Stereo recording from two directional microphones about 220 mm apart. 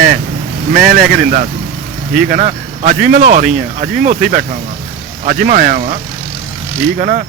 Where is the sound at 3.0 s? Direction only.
35° right (ahead or behind).